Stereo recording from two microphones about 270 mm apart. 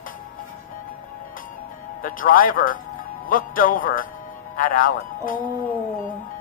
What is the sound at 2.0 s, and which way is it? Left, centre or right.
Speech, left.